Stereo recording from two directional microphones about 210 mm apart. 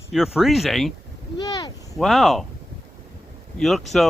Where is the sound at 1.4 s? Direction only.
20° left (ahead or behind).